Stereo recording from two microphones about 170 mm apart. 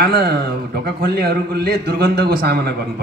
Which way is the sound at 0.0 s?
65° right (ahead or behind).